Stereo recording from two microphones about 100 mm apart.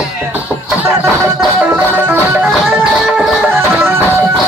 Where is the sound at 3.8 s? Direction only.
25° right (ahead or behind).